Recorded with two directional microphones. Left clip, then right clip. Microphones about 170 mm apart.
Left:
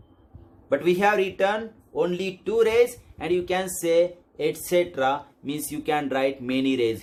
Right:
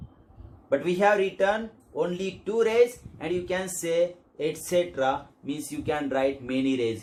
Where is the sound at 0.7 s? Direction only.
50° left (ahead or behind).